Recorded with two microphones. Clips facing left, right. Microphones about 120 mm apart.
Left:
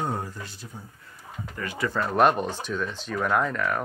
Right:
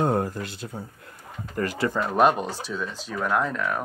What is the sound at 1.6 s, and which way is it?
Speech, 45° right (ahead or behind).